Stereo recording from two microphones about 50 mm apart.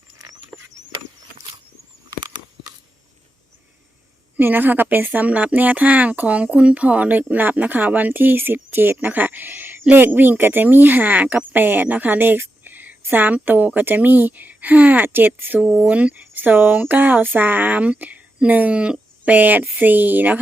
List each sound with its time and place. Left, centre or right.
4.4 s speech: right
5.2 s speech: right